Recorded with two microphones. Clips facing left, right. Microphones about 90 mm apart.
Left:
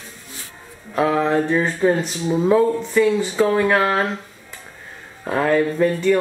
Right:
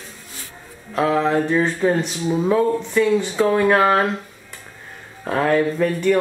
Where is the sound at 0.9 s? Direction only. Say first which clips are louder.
Even; 10° left (ahead or behind).